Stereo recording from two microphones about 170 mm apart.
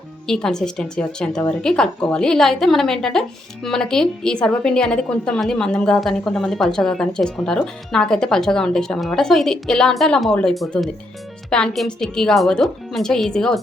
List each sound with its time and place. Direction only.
0.3 s a woman's voice: 5° left (ahead or behind)